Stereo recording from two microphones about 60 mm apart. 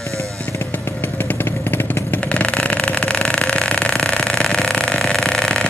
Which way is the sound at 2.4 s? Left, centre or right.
Left.